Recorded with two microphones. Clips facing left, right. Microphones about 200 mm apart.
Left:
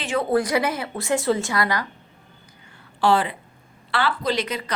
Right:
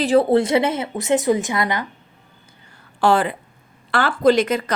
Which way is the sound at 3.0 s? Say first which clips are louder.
Right 3 dB; 50° right (ahead or behind).